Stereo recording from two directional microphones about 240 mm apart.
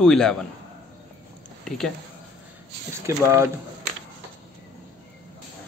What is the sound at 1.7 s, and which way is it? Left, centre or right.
Speech, centre.